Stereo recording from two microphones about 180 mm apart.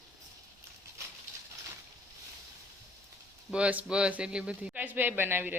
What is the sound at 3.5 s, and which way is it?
Speech, 5° right (ahead or behind).